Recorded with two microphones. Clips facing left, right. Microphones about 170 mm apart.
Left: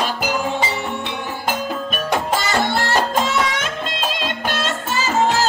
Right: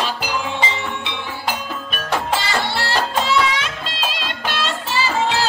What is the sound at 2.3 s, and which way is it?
Music, 45° left (ahead or behind).